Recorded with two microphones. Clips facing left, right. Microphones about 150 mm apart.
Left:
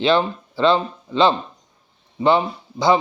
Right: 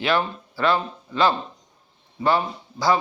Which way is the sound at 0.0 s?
25° left (ahead or behind).